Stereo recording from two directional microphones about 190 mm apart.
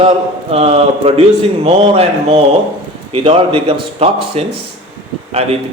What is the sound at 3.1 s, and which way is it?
A man's voice, 30° right (ahead or behind).